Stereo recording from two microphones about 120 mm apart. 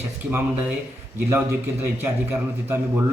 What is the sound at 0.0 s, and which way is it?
A man's voice, 15° right (ahead or behind).